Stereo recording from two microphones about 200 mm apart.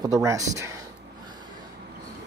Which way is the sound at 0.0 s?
15° right (ahead or behind).